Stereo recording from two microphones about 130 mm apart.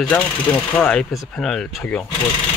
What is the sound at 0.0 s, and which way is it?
Speech, 10° left (ahead or behind).